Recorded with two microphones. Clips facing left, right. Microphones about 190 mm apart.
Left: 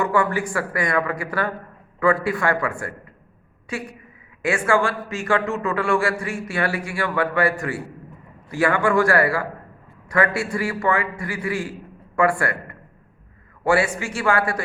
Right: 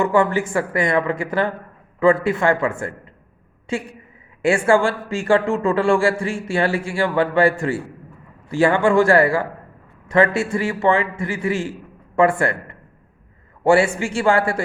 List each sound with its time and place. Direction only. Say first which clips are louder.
0.0 s a man's voice: right 4 dB; 25° right (ahead or behind)